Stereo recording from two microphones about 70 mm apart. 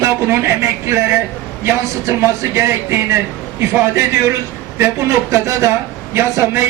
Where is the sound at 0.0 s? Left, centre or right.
Right.